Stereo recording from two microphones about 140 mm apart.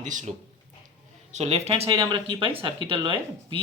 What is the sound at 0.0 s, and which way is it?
Speech, 60° right (ahead or behind).